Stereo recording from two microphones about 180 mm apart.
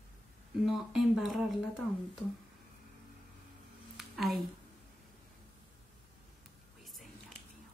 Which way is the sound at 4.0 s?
Centre (ahead or behind).